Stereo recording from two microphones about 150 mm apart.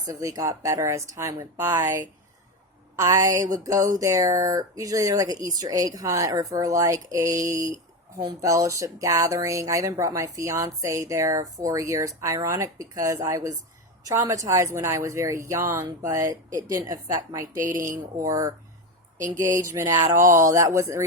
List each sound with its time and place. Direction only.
0.1 s speech: 20° right (ahead or behind)
19.5 s speech: 20° right (ahead or behind)